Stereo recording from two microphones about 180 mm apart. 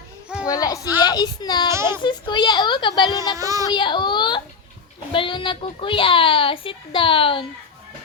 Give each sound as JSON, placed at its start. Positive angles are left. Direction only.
{"t": 0.4, "sound": "a woman's voice", "side_deg": 20}
{"t": 1.7, "sound": "a child's voice", "side_deg": -15}
{"t": 2.0, "sound": "a child's voice", "side_deg": 25}
{"t": 3.3, "sound": "speech", "side_deg": -20}
{"t": 3.7, "sound": "a child's voice", "side_deg": 25}